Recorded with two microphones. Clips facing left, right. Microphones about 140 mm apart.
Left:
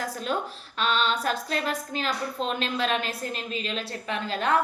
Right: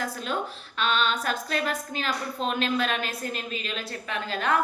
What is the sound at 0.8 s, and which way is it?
A woman's voice, 35° left (ahead or behind).